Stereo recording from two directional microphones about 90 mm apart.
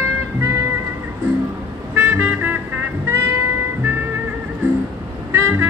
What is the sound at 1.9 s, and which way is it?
Music, 15° right (ahead or behind).